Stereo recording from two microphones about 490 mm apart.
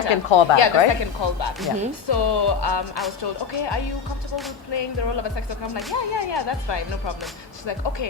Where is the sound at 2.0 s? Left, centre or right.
Left.